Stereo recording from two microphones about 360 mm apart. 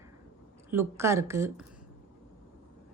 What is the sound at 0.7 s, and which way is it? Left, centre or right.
Speech, centre.